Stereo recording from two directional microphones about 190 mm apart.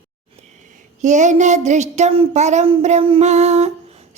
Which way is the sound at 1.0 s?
40° right (ahead or behind).